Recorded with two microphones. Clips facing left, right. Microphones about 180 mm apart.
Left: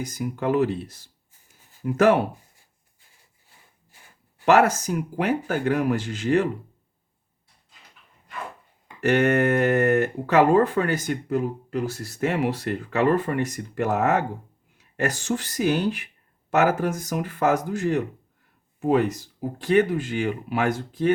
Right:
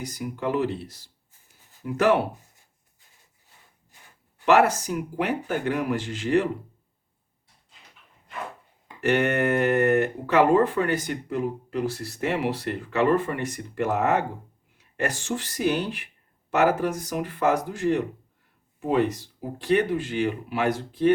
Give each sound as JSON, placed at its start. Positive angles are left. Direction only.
{"t": 0.0, "sound": "speech", "side_deg": 45}
{"t": 4.4, "sound": "speech", "side_deg": 45}
{"t": 9.0, "sound": "speech", "side_deg": 40}